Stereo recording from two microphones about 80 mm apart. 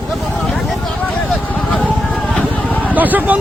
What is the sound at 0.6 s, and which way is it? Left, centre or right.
Vehicle, centre.